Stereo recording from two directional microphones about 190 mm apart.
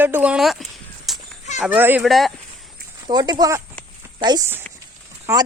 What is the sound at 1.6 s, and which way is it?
Speech, 10° right (ahead or behind).